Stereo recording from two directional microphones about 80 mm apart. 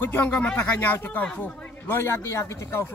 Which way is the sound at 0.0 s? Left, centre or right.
Left.